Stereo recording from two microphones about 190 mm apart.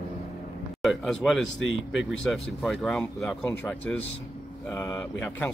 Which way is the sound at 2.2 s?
Centre (ahead or behind).